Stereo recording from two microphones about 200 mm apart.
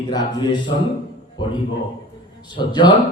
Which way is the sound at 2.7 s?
25° left (ahead or behind).